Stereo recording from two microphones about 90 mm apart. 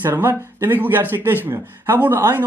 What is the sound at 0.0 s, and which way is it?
Speech, 25° right (ahead or behind).